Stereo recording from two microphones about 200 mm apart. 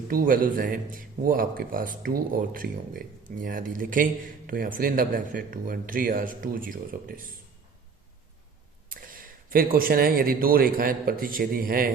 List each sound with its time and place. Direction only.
0.1 s speech: 45° right (ahead or behind)
8.9 s a man's voice: 45° right (ahead or behind)